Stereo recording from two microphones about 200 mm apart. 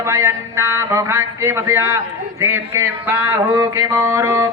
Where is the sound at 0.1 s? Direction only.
15° right (ahead or behind).